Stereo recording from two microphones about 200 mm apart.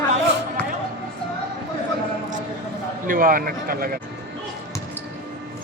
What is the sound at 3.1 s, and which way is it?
Speech, 45° right (ahead or behind).